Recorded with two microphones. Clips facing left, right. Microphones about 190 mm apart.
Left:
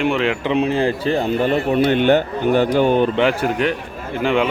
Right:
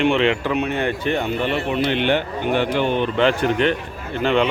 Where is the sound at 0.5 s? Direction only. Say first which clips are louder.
Left 4 dB; 30° left (ahead or behind).